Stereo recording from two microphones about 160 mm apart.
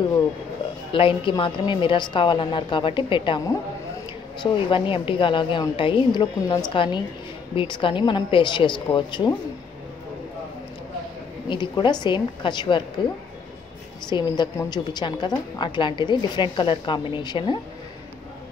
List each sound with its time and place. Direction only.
0.9 s a woman's voice: 30° left (ahead or behind)
11.4 s a woman's voice: 30° left (ahead or behind)
14.1 s a woman's voice: 25° left (ahead or behind)